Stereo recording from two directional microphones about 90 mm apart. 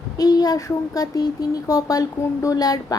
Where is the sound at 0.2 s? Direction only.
45° left (ahead or behind).